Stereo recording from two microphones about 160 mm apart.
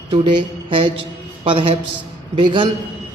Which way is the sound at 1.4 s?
35° right (ahead or behind).